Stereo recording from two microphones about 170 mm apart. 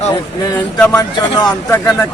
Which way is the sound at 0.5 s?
10° left (ahead or behind).